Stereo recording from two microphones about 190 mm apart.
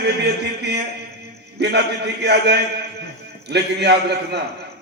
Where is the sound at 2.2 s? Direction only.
60° right (ahead or behind).